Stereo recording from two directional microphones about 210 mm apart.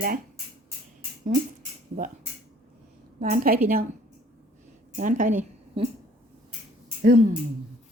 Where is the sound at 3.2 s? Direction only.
40° right (ahead or behind).